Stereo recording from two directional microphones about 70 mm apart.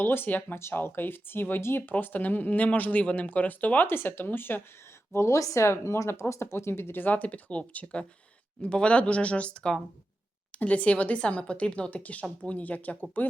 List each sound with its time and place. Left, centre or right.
0.0 s speech: left
5.1 s speech: left